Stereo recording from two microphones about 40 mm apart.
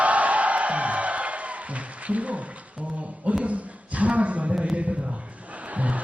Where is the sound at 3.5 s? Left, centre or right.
Right.